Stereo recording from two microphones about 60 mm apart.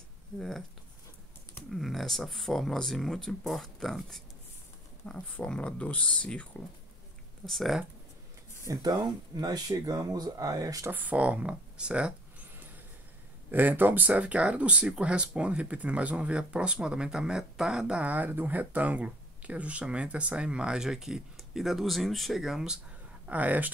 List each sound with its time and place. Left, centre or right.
0.4 s speech: centre
1.7 s speech: centre
5.0 s speech: centre
7.4 s speech: centre
9.5 s speech: right
10.9 s speech: right
13.5 s speech: right; by 18.0 s centre
18.0 s speech: right; by 22.8 s centre
23.2 s speech: right